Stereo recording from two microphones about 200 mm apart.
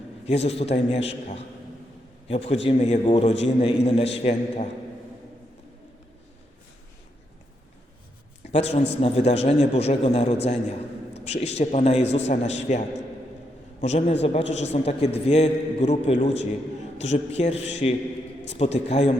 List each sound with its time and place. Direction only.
0.3 s a man's voice: 30° left (ahead or behind)
8.5 s a man's voice: 30° left (ahead or behind)
13.8 s a man's voice: 35° left (ahead or behind)